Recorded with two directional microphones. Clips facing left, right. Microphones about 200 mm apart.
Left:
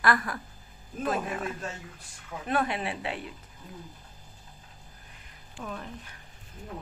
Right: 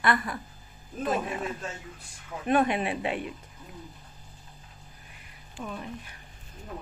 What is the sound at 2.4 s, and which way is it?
Speech, 20° right (ahead or behind).